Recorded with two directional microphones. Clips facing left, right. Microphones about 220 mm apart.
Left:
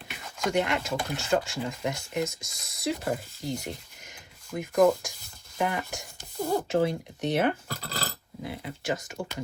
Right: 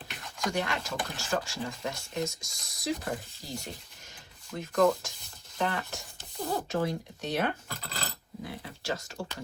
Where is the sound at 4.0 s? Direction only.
15° left (ahead or behind).